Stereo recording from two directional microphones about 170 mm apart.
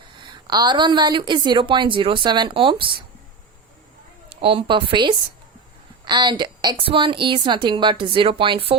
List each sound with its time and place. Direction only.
0.2 s a woman's voice: 25° right (ahead or behind)
4.4 s a woman's voice: 35° right (ahead or behind)